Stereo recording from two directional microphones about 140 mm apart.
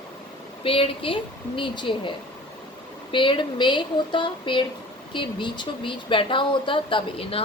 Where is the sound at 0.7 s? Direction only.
40° left (ahead or behind).